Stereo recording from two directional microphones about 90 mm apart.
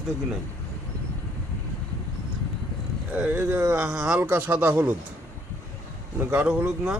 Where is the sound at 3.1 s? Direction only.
20° right (ahead or behind).